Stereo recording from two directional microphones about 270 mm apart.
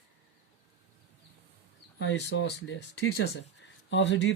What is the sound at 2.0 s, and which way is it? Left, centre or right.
Speech, left.